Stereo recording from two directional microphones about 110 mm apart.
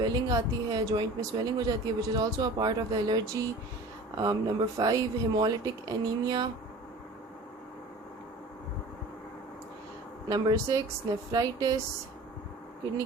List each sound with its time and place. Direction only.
0.0 s speech: 35° right (ahead or behind)
10.2 s speech: 35° right (ahead or behind)